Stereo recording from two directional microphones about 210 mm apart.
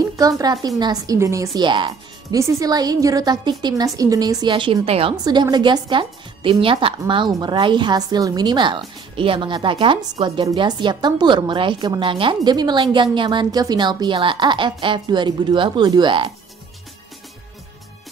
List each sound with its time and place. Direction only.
0.0 s a woman's voice: 15° right (ahead or behind)